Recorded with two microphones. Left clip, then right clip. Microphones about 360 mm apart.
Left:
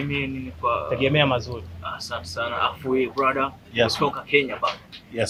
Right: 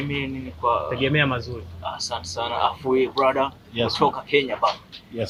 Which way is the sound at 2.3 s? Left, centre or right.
Centre.